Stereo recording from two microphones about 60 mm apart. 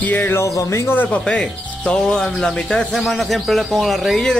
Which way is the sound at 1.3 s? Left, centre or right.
Centre.